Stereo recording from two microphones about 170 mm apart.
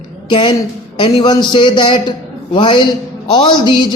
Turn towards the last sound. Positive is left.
turn(degrees=25)  # may be behind; listen again after turning